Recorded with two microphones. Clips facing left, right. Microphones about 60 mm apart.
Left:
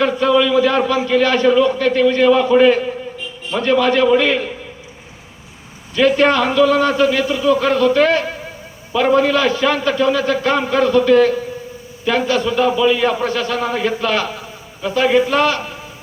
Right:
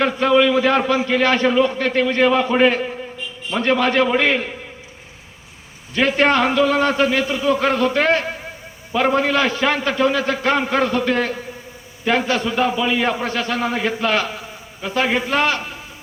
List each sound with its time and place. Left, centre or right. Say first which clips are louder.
0.0 s a man's voice: left 1 dB; right
5.9 s a man's voice: left 3 dB; right; by 15.6 s centre